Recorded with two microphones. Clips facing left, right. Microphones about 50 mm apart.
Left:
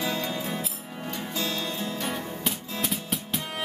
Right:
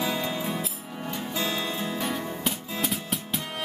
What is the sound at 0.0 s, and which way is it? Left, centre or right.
Music, centre.